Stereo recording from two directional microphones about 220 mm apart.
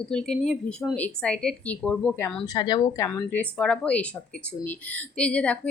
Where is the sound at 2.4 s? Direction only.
20° left (ahead or behind).